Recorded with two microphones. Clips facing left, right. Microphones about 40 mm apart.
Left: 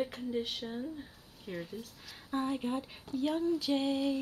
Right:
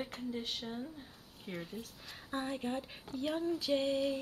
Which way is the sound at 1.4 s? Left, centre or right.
Right.